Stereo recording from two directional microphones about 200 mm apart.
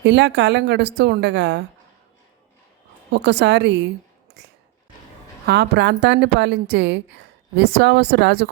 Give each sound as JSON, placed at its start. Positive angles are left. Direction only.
{"t": 0.0, "sound": "a woman's voice", "side_deg": -60}
{"t": 3.1, "sound": "a woman's voice", "side_deg": -60}
{"t": 4.4, "sound": "a sound", "side_deg": -60}
{"t": 5.5, "sound": "a woman's voice", "side_deg": -55}